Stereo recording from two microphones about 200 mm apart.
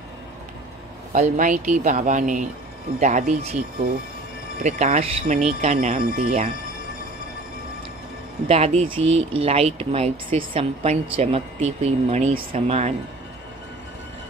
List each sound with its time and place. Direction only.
1.1 s speech: 40° right (ahead or behind)
8.5 s speech: 30° right (ahead or behind)